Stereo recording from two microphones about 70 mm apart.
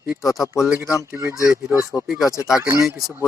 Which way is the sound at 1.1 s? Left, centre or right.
Right.